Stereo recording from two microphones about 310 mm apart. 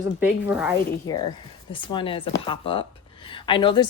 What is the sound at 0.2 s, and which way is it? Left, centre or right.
Speech, centre.